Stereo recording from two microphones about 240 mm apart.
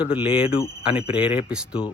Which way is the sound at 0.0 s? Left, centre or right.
Centre.